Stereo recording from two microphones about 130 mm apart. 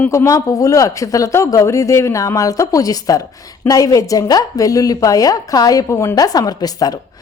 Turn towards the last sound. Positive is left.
turn(degrees=30)  # may be behind; listen again after turning